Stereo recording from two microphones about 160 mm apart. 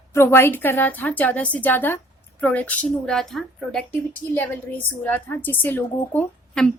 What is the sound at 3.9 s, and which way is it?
A woman's voice, 10° left (ahead or behind).